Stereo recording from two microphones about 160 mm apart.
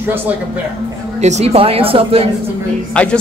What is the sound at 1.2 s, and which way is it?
A man's voice, 45° right (ahead or behind).